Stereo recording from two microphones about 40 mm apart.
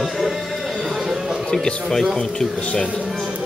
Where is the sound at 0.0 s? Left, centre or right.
Centre.